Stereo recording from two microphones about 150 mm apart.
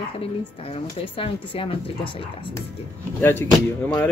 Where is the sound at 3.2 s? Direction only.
15° left (ahead or behind).